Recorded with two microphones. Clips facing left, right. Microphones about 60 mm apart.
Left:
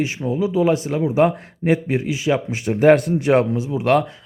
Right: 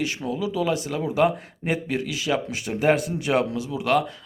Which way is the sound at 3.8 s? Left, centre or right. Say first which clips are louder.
Left 4 dB; left.